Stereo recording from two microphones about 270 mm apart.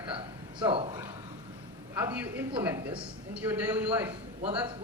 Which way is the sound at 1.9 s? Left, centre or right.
Centre.